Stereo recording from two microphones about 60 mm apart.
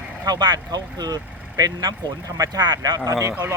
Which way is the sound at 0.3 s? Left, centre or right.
Right.